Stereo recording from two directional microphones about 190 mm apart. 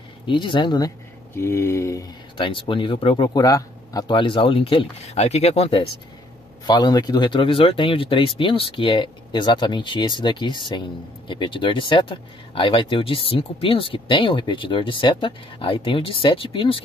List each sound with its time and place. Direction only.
0.3 s speech: 25° left (ahead or behind)